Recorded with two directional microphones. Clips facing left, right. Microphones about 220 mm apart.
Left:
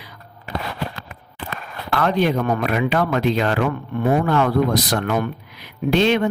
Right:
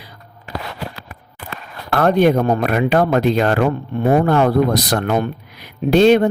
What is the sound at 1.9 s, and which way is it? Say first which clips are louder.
Speech: right 5 dB; 50° right (ahead or behind).